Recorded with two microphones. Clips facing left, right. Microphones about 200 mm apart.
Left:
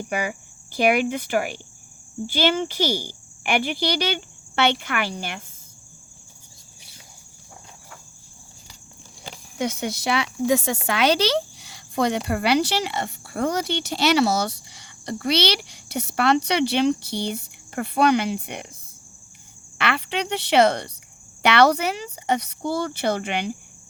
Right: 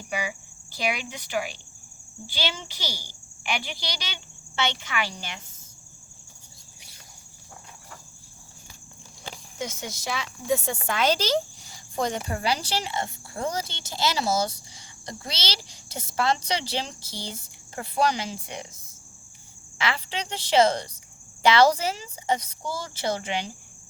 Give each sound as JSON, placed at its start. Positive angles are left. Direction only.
{"t": 0.1, "sound": "speech", "side_deg": 55}
{"t": 9.6, "sound": "speech", "side_deg": 60}
{"t": 19.8, "sound": "speech", "side_deg": 65}